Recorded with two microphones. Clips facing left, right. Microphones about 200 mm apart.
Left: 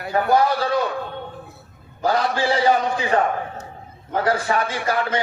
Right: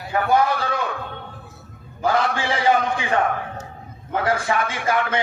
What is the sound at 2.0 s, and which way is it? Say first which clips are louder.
A man's voice: left 1 dB; 35° left (ahead or behind).